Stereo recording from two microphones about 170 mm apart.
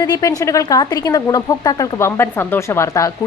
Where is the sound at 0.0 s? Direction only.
20° left (ahead or behind).